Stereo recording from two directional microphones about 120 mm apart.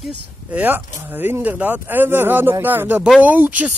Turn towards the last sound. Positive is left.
turn(degrees=-15)  # may be behind; listen again after turning